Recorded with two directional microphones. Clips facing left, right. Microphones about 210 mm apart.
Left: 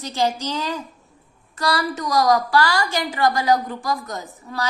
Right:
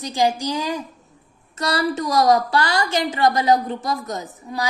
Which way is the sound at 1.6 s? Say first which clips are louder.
Right 2 dB; 25° right (ahead or behind).